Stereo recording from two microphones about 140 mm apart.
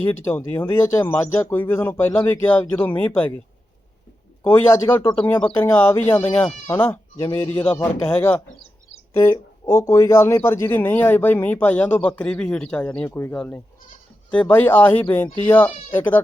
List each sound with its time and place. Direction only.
0.0 s speech: 15° left (ahead or behind)
4.4 s speech: 15° left (ahead or behind)